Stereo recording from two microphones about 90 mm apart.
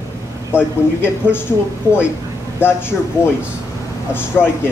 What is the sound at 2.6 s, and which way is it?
Speech, 25° left (ahead or behind).